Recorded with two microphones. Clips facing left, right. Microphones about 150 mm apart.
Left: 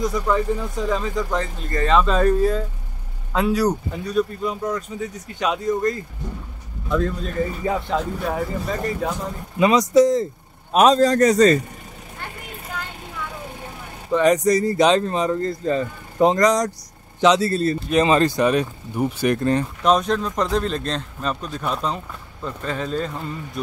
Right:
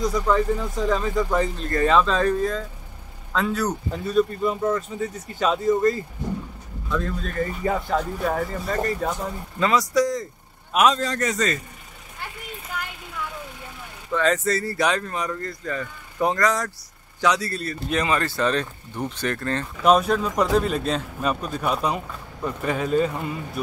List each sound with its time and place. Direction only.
0.0 s speech: centre (ahead or behind)
4.0 s speech: centre (ahead or behind)
7.0 s speech: centre (ahead or behind)
9.6 s speech: 20° left (ahead or behind)
10.7 s a man's voice: 35° left (ahead or behind)
14.1 s speech: 15° left (ahead or behind)
19.8 s speech: 5° right (ahead or behind)